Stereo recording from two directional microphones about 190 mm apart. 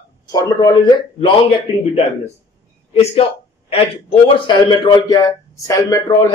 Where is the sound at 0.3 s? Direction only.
20° left (ahead or behind).